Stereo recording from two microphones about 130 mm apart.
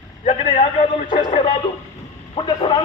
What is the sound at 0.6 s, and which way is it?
Speech, 50° left (ahead or behind).